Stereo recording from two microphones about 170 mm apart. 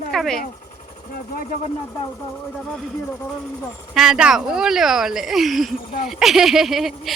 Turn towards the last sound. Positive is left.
turn(degrees=0)  # may be behind; listen again after turning